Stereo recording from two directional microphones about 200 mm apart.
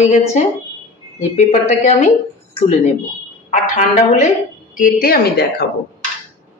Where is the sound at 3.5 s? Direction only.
35° left (ahead or behind); by 5.6 s 55° left (ahead or behind).